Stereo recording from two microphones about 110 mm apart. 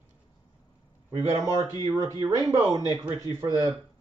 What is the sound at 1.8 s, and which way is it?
Speech, 35° right (ahead or behind).